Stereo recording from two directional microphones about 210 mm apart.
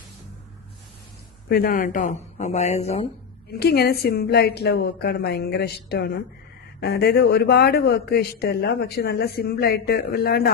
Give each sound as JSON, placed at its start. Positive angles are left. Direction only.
{"t": 1.5, "sound": "speech", "side_deg": 45}
{"t": 3.6, "sound": "a man's voice", "side_deg": 50}